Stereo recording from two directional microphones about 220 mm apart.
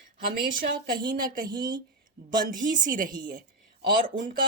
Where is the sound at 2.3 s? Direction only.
40° right (ahead or behind).